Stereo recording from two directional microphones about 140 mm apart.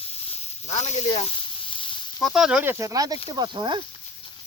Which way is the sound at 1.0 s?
40° left (ahead or behind).